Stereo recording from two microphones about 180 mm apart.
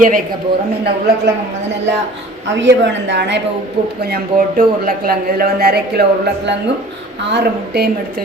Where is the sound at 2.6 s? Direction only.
75° right (ahead or behind).